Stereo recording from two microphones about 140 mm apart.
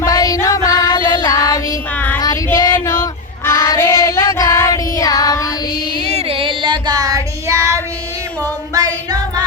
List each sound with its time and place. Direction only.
0.0 s music: 25° left (ahead or behind)
2.0 s child singing: 15° left (ahead or behind)
2.5 s female singing: 15° left (ahead or behind)
6.1 s child singing: 40° right (ahead or behind); by 7.8 s 20° right (ahead or behind)
8.4 s female singing: 25° right (ahead or behind)